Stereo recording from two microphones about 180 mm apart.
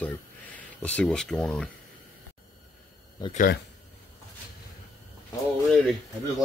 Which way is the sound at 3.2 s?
20° left (ahead or behind).